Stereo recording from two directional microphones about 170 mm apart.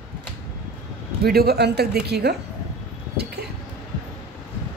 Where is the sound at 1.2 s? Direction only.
65° right (ahead or behind).